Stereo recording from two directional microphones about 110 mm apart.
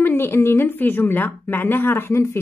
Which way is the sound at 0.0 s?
20° left (ahead or behind).